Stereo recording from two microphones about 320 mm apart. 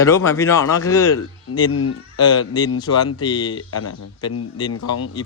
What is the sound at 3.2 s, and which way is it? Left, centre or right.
Speech, centre.